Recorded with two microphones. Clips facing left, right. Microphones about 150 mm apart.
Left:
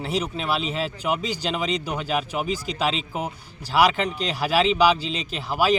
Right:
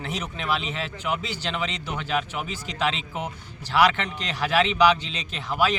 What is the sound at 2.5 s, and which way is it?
Speech, 35° left (ahead or behind).